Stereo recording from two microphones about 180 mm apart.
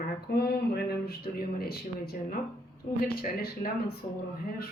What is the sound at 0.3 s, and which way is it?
Speech, 65° left (ahead or behind).